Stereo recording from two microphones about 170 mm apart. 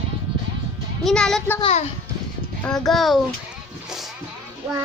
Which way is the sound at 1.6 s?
35° left (ahead or behind).